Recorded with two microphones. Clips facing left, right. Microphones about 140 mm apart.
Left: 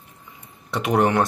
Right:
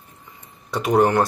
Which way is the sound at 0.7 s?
Centre (ahead or behind).